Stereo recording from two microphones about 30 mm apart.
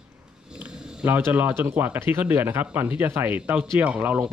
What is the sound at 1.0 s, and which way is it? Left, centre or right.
Speech, right.